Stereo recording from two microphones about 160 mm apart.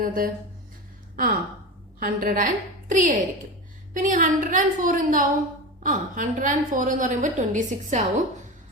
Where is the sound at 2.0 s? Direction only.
60° right (ahead or behind).